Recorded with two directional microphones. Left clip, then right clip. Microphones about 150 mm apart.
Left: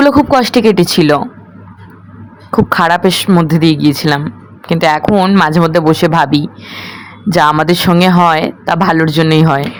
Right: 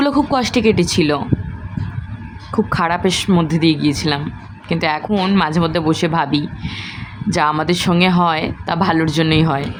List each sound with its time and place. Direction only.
0.0 s speech: 40° left (ahead or behind)
2.5 s speech: 45° left (ahead or behind)